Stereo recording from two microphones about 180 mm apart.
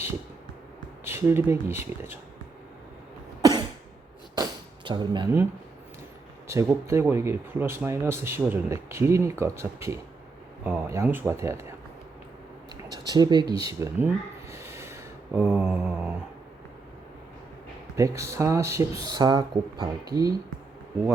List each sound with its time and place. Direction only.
1.0 s speech: 15° right (ahead or behind)
4.4 s a sound: 25° right (ahead or behind)
6.5 s speech: 15° right (ahead or behind)
12.9 s a sound: 20° right (ahead or behind)
13.5 s speech: 20° right (ahead or behind)
17.9 s speech: 15° right (ahead or behind)